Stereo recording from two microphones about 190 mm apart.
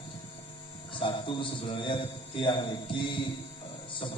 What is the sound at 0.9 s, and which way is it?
A man's voice, 25° left (ahead or behind).